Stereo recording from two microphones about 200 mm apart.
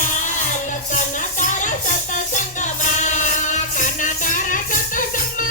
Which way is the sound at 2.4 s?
40° left (ahead or behind).